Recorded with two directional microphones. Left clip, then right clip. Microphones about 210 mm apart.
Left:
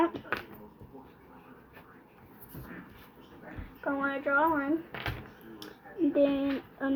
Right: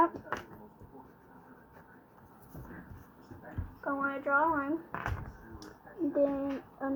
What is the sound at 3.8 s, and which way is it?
Speech, 20° left (ahead or behind).